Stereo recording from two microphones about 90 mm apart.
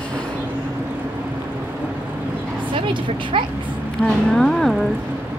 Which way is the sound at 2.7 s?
70° right (ahead or behind).